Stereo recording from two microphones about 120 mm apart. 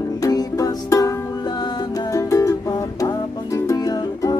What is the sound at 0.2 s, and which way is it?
Music, 30° left (ahead or behind).